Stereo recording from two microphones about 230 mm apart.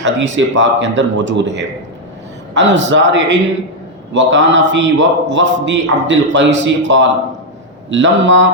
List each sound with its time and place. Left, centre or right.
0.0 s a man's voice: right